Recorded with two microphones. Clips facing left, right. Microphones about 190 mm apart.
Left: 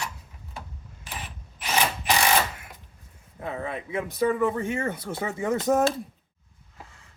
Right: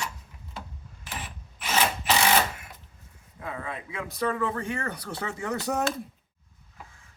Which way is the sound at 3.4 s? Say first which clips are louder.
Left 4 dB; 25° left (ahead or behind).